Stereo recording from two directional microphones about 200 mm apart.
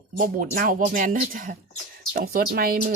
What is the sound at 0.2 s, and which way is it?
Speech, 45° right (ahead or behind).